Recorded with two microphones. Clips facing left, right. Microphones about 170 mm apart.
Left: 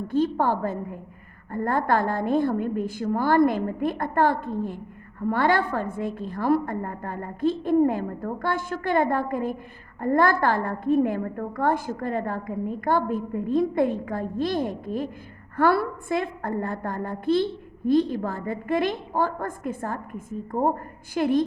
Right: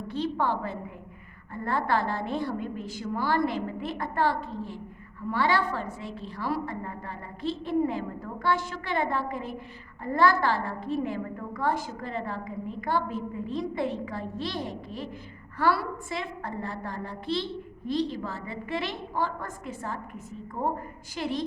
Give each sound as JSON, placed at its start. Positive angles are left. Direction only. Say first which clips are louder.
{"t": 0.1, "sound": "a woman's voice", "louder": "left 5 dB", "side_deg": 50}